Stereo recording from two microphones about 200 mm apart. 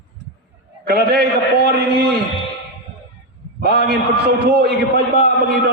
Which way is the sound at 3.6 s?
55° right (ahead or behind).